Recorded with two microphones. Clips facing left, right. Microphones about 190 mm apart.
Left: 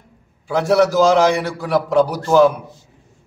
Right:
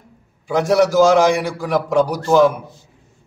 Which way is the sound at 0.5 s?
15° right (ahead or behind).